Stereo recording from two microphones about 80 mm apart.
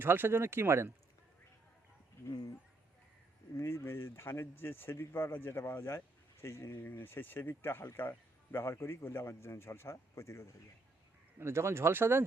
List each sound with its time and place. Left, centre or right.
0.0 s speech: right
3.6 s speech: left
11.3 s speech: right